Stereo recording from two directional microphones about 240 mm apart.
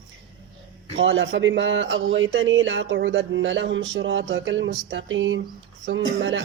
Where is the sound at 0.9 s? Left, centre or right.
Right.